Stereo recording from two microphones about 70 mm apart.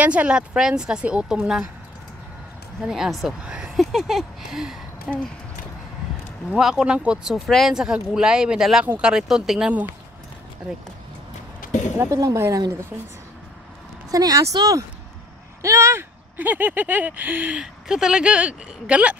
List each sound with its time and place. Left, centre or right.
0.0 s a woman's voice: centre
2.8 s speech: centre
3.4 s speech: centre
3.7 s speech: centre
6.5 s a woman's voice: centre
7.3 s a woman's voice: centre
12.1 s speech: right
14.1 s speech: right
15.6 s speech: right
16.3 s speech: right
17.8 s a woman's voice: centre